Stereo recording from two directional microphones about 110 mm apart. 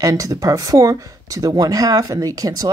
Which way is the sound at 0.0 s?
30° right (ahead or behind).